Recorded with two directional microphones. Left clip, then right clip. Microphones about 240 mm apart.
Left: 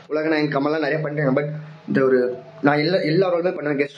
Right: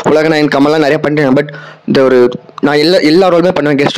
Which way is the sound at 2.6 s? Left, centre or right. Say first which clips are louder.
Right 10 dB; right.